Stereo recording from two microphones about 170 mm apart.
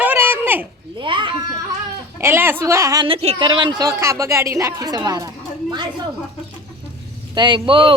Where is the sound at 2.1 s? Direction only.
15° right (ahead or behind).